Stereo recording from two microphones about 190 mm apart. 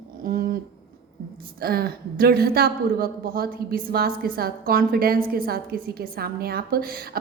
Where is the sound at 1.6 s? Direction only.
55° right (ahead or behind).